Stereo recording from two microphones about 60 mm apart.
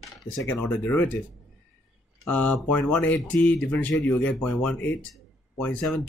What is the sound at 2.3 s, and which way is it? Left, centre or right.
Speech, left.